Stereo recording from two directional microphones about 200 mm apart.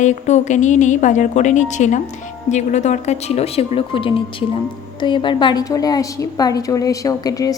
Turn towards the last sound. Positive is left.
turn(degrees=15)  # may be behind; listen again after turning